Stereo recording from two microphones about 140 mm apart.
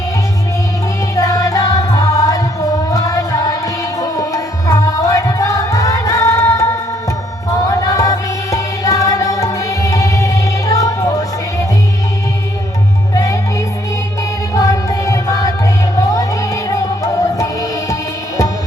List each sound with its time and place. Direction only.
1.1 s music: 25° left (ahead or behind)
7.7 s music: 25° left (ahead or behind)
13.1 s music: 25° left (ahead or behind)
14.5 s music: 25° left (ahead or behind)